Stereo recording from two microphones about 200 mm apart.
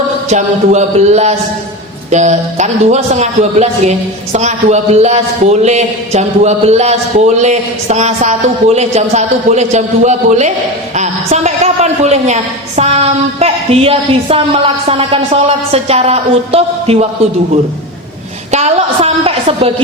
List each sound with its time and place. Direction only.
0.3 s a man's voice: 35° right (ahead or behind)
18.5 s a woman's voice: 30° right (ahead or behind)